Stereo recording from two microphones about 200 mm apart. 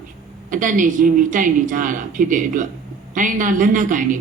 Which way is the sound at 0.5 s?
40° right (ahead or behind).